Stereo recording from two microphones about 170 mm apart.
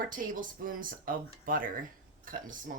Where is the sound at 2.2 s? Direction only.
55° right (ahead or behind).